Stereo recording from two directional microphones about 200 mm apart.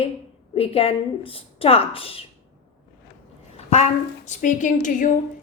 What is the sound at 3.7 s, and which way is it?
A woman's voice, 35° left (ahead or behind).